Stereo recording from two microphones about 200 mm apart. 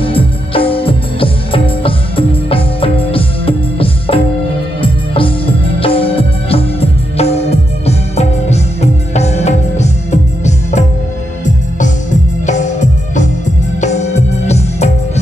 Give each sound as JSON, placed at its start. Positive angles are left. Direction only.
{"t": 0.0, "sound": "music", "side_deg": 25}
{"t": 12.4, "sound": "music", "side_deg": 35}